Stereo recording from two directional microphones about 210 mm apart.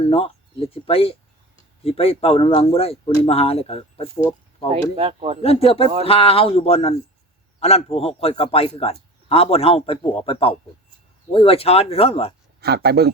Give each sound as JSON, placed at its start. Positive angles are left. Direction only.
{"t": 0.0, "sound": "a man's voice", "side_deg": 25}
{"t": 4.7, "sound": "speech", "side_deg": -25}
{"t": 5.4, "sound": "a man's voice", "side_deg": 30}
{"t": 12.5, "sound": "speech", "side_deg": -50}